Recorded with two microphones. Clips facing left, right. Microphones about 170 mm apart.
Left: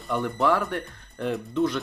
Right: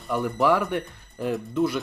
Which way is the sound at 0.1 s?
Centre (ahead or behind).